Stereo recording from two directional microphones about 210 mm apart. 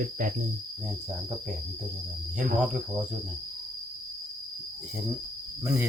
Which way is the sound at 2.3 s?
5° right (ahead or behind).